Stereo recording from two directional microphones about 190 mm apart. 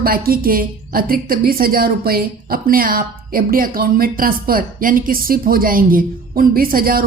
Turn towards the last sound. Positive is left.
turn(degrees=-50)  # may be behind; listen again after turning